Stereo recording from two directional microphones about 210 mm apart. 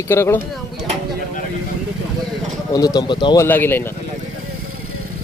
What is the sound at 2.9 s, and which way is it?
Speech, 20° left (ahead or behind).